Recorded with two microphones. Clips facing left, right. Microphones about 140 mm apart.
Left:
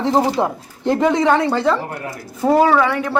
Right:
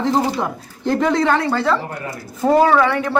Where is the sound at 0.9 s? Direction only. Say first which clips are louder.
Left 2 dB; 15° left (ahead or behind).